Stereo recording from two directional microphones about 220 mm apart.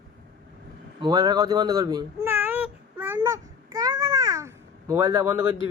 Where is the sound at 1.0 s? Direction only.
20° right (ahead or behind).